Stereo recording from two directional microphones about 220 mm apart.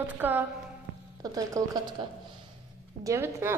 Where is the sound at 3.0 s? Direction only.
10° right (ahead or behind).